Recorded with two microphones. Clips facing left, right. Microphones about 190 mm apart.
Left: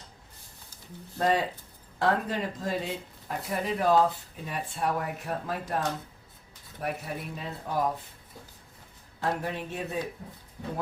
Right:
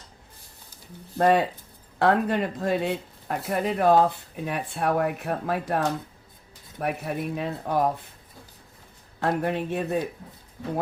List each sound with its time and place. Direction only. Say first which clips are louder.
1.2 s speech: right 6 dB; 60° right (ahead or behind)
9.2 s speech: right 6 dB; 60° right (ahead or behind)